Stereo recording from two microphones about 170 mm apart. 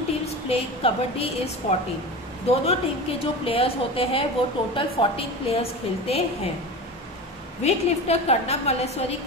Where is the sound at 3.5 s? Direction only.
35° left (ahead or behind).